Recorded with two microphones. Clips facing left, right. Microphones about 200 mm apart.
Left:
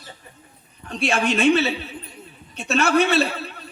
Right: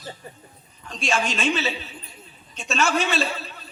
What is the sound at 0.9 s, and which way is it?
A man's voice, 60° left (ahead or behind).